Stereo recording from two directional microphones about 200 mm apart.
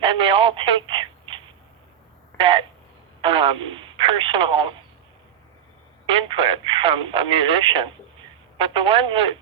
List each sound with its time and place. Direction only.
0.0 s speech: 25° right (ahead or behind)
2.4 s speech: 25° right (ahead or behind)
6.1 s speech: 25° right (ahead or behind)